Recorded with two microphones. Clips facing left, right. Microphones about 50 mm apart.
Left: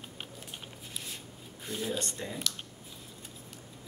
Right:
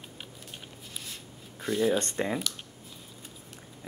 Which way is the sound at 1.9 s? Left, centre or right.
Right.